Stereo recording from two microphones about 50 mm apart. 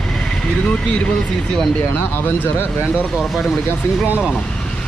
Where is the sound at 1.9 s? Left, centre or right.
Left.